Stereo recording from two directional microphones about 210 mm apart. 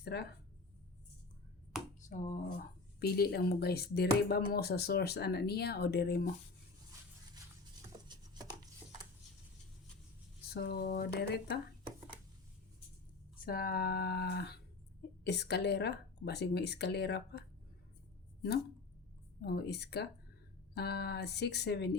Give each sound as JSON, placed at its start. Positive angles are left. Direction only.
{"t": 0.0, "sound": "speech", "side_deg": 50}
{"t": 2.0, "sound": "speech", "side_deg": 35}
{"t": 8.0, "sound": "a sound", "side_deg": -20}
{"t": 10.5, "sound": "speech", "side_deg": 50}
{"t": 13.4, "sound": "speech", "side_deg": 45}
{"t": 19.5, "sound": "speech", "side_deg": 50}